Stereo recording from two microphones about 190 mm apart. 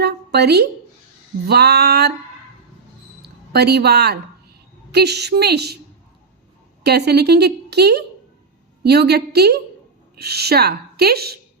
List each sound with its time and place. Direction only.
0.0 s a woman's voice: 60° right (ahead or behind)
3.5 s a woman's voice: 60° right (ahead or behind)
6.8 s a woman's voice: 60° right (ahead or behind)